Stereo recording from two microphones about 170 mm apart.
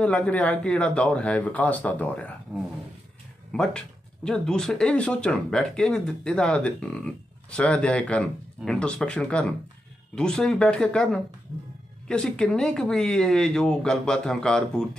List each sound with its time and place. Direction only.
0.0 s a man's voice: 5° left (ahead or behind)
3.5 s a man's voice: 5° left (ahead or behind)